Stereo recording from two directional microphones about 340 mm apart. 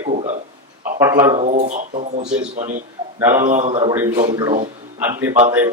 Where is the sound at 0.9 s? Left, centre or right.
Centre.